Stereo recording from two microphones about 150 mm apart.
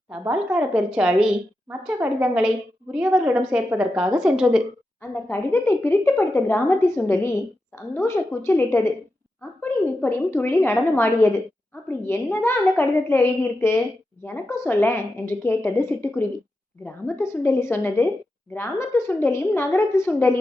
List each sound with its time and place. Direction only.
0.1 s a woman's voice: 5° right (ahead or behind)
5.1 s a woman's voice: 15° left (ahead or behind)